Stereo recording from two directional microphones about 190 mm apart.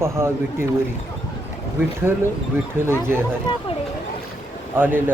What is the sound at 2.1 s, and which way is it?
Speech, 10° right (ahead or behind).